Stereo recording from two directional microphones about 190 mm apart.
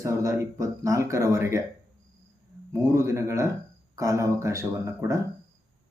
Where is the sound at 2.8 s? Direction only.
15° right (ahead or behind).